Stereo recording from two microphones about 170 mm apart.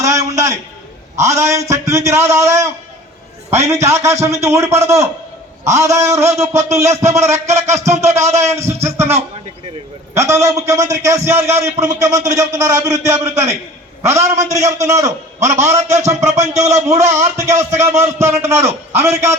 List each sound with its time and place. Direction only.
0.0 s a sound: 20° right (ahead or behind)
1.1 s a man's voice: 15° right (ahead or behind)
10.2 s a man's voice: 15° right (ahead or behind)